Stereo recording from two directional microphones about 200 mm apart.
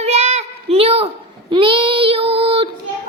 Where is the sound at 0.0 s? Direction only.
30° right (ahead or behind).